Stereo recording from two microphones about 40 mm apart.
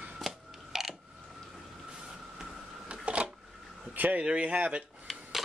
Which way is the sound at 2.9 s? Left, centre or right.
Right.